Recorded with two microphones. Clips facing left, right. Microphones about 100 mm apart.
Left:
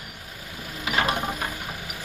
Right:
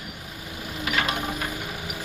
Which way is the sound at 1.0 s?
40° left (ahead or behind).